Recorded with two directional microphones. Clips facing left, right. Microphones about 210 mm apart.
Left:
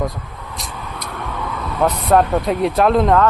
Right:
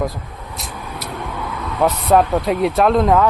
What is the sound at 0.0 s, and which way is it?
Vehicle, centre (ahead or behind).